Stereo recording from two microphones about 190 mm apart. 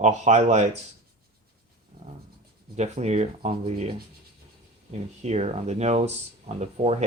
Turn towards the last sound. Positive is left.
turn(degrees=-35)  # may be behind; listen again after turning